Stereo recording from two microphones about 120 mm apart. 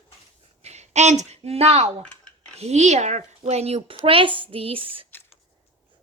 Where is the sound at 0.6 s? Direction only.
65° right (ahead or behind).